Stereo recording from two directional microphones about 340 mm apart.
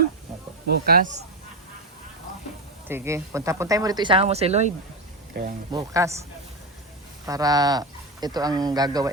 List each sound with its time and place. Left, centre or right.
0.7 s speech: right
2.8 s speech: centre; by 5.5 s right
5.7 s speech: centre
7.3 s speech: centre